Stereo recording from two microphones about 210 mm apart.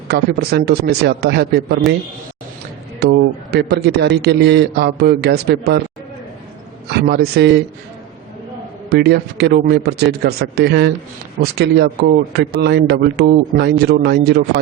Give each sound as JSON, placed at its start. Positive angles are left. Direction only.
{"t": 0.1, "sound": "speech", "side_deg": -50}
{"t": 3.0, "sound": "speech", "side_deg": -50}
{"t": 6.9, "sound": "speech", "side_deg": -50}
{"t": 8.9, "sound": "speech", "side_deg": -55}